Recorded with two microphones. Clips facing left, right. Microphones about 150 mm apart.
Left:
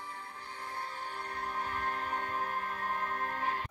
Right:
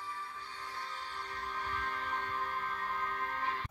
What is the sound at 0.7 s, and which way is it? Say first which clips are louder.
Music: left 4 dB; 50° left (ahead or behind).